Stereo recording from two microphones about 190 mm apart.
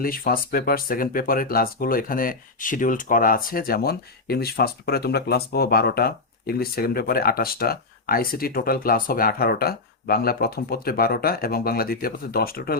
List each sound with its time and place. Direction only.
0.0 s speech: 50° left (ahead or behind)